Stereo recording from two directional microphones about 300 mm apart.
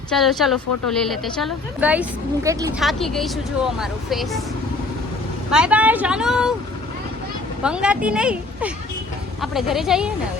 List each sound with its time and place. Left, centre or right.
0.1 s a woman's voice: centre
2.8 s a woman's voice: centre
5.5 s a woman's voice: centre
7.6 s a woman's voice: centre